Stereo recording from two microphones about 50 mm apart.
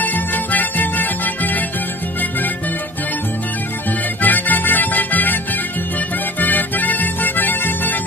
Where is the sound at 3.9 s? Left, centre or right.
Left.